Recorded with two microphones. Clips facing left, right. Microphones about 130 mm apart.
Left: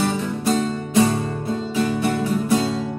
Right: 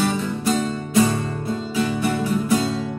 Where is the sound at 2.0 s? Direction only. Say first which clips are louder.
Left 1 dB; 35° left (ahead or behind).